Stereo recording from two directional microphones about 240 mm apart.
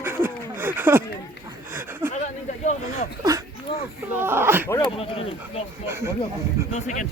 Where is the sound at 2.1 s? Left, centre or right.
Left.